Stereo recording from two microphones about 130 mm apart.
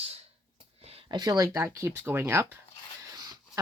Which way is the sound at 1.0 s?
30° right (ahead or behind).